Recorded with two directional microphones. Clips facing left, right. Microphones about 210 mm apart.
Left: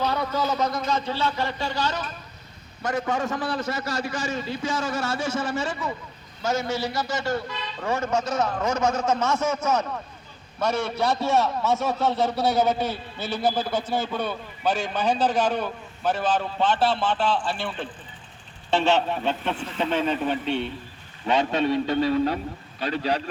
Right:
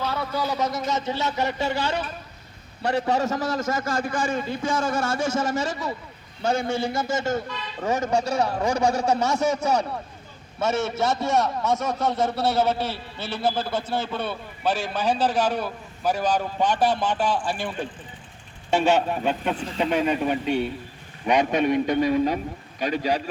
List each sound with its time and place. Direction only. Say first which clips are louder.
0.0 s a man's voice: left 2 dB; 5° right (ahead or behind)
19.5 s speech: right 2 dB; 35° right (ahead or behind)
19.8 s a man's voice: right 2 dB; 15° right (ahead or behind)